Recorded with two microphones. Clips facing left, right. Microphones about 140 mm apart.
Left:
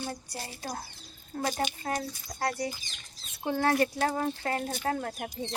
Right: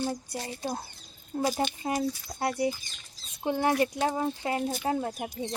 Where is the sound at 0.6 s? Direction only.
25° right (ahead or behind).